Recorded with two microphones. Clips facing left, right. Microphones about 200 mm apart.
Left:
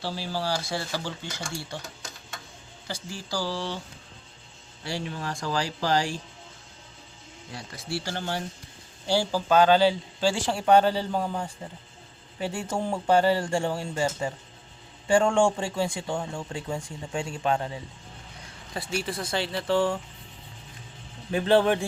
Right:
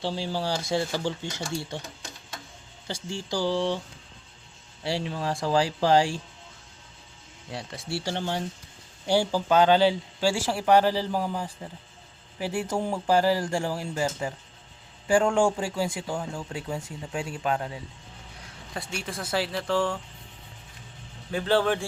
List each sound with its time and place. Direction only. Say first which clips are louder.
0.0 s speech: right 2 dB; 20° right (ahead or behind)
2.8 s speech: right 3 dB; 25° right (ahead or behind)
4.8 s speech: right 3 dB; 30° right (ahead or behind)
7.9 s speech: right 1 dB; 25° right (ahead or behind); by 20.0 s 5° left (ahead or behind)
21.3 s speech: left 3 dB; 20° left (ahead or behind)